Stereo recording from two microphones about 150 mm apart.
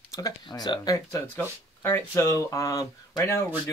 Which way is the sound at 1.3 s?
15° left (ahead or behind).